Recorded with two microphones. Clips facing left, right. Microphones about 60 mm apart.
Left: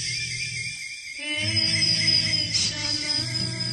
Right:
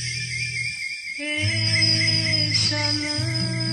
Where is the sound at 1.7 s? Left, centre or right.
Right.